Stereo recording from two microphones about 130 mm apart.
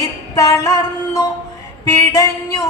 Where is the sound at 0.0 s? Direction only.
25° left (ahead or behind).